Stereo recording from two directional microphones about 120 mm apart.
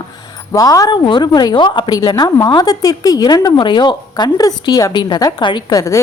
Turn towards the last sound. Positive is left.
turn(degrees=30)  # may be behind; listen again after turning